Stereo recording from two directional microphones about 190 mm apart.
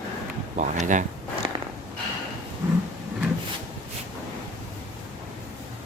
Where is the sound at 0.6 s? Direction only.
40° right (ahead or behind).